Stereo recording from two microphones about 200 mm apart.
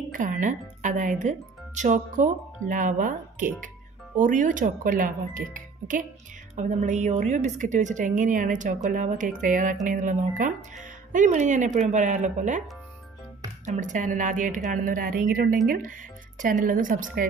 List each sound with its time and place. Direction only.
0.1 s a woman's voice: 40° right (ahead or behind)
13.7 s a woman's voice: 40° right (ahead or behind)